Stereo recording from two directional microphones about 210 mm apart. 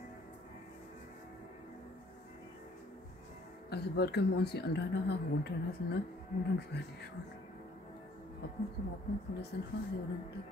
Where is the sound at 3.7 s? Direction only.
50° left (ahead or behind).